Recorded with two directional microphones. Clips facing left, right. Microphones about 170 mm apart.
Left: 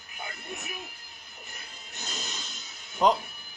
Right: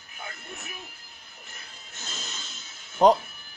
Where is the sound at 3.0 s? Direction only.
35° right (ahead or behind).